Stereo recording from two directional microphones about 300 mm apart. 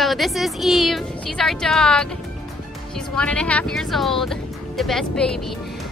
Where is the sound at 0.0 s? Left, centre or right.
Centre.